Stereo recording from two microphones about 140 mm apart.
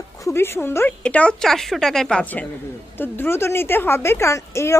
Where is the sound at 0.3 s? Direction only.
20° left (ahead or behind).